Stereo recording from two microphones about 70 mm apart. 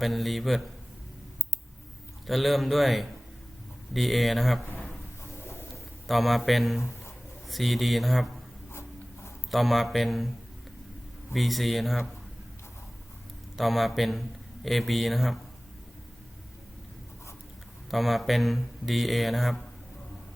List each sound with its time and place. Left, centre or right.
0.0 s a man's voice: centre
2.2 s a man's voice: centre
5.4 s bird: left
6.1 s a man's voice: centre
9.5 s a man's voice: centre
11.3 s a man's voice: centre
13.6 s a man's voice: centre
17.9 s a man's voice: centre